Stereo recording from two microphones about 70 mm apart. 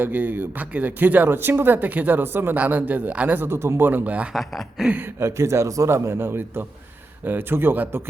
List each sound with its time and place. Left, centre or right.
0.0 s speech: right
4.4 s speech: centre
5.2 s a man's voice: right